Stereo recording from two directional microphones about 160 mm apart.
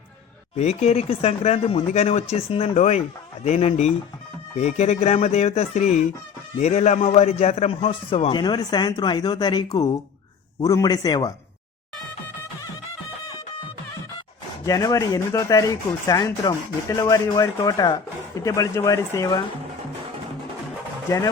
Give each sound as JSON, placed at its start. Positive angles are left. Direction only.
{"t": 0.5, "sound": "a man's voice", "side_deg": 45}
{"t": 14.6, "sound": "speech", "side_deg": 20}